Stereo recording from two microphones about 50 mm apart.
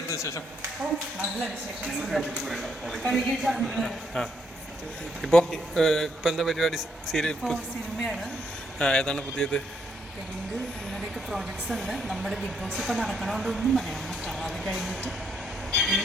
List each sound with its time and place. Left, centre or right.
0.1 s speech: left
1.8 s speech: centre
5.3 s speech: centre
8.8 s speech: centre
10.9 s speech: centre
15.7 s vehicle: centre